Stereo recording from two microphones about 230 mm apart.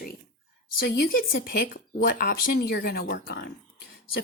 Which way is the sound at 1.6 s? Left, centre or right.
Left.